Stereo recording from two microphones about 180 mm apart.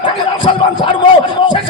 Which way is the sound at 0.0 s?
25° left (ahead or behind).